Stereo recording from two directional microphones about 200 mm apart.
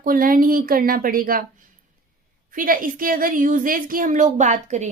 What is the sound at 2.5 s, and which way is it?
A woman's voice, 45° right (ahead or behind).